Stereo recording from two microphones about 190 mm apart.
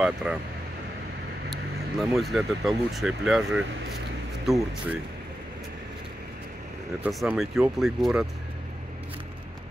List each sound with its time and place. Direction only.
0.0 s speech: 5° right (ahead or behind)
1.5 s speech: centre (ahead or behind)
7.0 s speech: centre (ahead or behind)